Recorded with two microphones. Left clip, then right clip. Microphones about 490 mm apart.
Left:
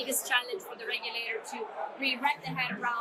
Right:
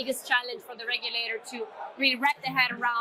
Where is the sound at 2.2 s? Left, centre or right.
Right.